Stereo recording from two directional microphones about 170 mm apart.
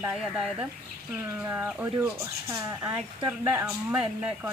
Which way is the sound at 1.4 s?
10° right (ahead or behind).